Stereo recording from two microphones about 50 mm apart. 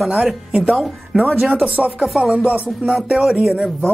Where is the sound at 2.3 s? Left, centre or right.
Right.